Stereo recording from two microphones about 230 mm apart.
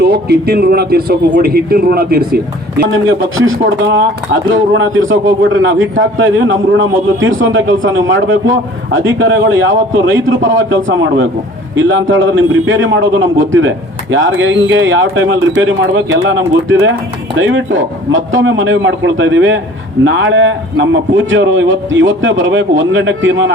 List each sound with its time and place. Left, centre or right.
0.0 s a man's voice: right